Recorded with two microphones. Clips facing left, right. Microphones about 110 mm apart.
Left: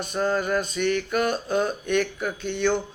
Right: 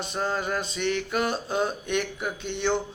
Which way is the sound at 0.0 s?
25° right (ahead or behind).